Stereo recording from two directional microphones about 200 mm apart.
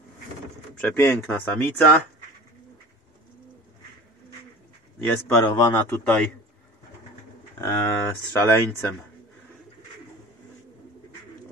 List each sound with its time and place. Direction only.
0.7 s speech: 10° left (ahead or behind)
5.0 s speech: 10° left (ahead or behind)
7.6 s speech: 15° left (ahead or behind)